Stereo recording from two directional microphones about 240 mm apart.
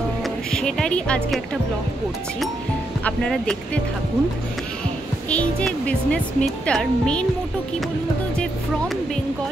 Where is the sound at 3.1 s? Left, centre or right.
Centre.